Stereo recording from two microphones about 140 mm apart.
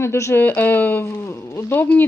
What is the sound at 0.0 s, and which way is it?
A woman's voice, 20° left (ahead or behind).